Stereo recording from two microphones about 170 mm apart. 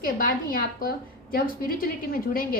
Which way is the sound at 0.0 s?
60° left (ahead or behind).